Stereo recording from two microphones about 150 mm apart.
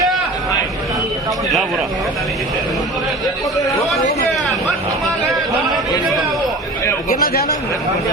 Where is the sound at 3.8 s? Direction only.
Centre (ahead or behind).